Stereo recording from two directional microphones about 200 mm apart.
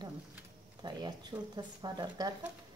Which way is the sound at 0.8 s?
20° right (ahead or behind).